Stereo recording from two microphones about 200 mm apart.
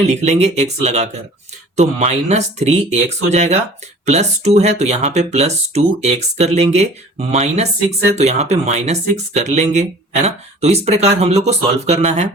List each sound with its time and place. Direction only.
0.0 s speech: 35° right (ahead or behind)